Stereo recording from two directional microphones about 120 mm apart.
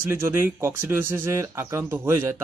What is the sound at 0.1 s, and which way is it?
Speech, 20° right (ahead or behind).